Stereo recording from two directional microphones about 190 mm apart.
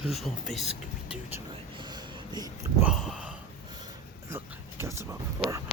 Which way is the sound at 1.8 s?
20° right (ahead or behind).